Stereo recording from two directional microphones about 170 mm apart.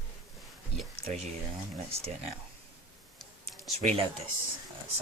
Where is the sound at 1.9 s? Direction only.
35° right (ahead or behind).